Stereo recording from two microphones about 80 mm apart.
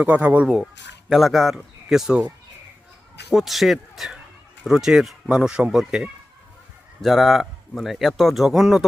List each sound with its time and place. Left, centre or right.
0.0 s speech: centre
1.1 s speech: centre
3.2 s speech: centre